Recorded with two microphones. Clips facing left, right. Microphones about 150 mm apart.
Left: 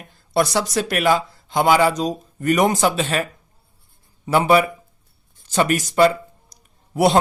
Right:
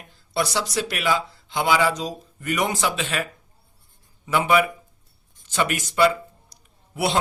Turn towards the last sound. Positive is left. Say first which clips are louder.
# left 8 dB
turn(degrees=40)  # may be behind; listen again after turning